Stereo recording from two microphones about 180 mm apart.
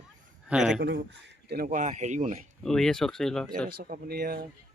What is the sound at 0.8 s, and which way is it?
Speech, 65° right (ahead or behind).